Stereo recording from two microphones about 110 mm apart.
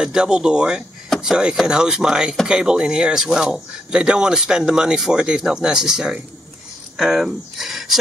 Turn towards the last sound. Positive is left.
turn(degrees=0)  # may be behind; listen again after turning